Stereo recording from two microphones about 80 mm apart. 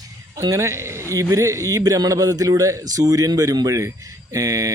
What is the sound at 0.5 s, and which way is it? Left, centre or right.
A man's voice, right.